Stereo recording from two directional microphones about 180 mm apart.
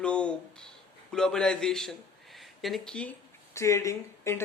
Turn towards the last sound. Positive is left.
turn(degrees=15)  # may be behind; listen again after turning